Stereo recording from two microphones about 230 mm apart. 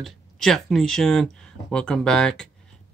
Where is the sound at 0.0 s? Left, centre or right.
Centre.